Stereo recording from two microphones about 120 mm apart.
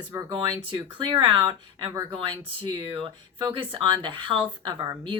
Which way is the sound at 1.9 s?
25° right (ahead or behind).